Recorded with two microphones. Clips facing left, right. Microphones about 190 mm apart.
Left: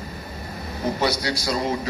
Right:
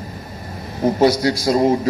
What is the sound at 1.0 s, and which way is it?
Speech, 45° right (ahead or behind).